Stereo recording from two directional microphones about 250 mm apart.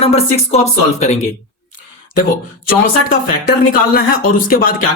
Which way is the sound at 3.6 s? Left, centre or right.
Left.